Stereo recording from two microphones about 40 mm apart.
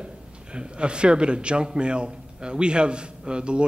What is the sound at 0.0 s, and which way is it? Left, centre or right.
A man's voice, right.